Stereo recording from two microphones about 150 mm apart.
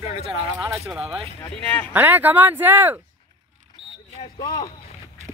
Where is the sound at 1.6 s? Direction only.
10° left (ahead or behind).